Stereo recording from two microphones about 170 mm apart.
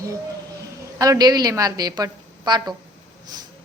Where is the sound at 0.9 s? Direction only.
20° right (ahead or behind).